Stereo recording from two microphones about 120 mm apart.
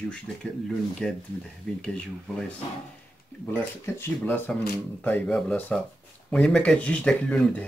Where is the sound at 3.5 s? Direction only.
20° left (ahead or behind).